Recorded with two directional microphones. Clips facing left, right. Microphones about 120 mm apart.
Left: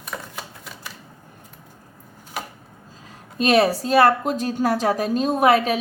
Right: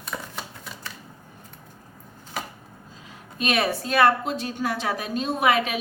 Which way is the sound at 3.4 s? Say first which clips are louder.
Left 7 dB; 35° left (ahead or behind).